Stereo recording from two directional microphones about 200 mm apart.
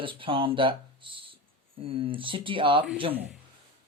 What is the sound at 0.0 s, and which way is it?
Speech, 25° right (ahead or behind).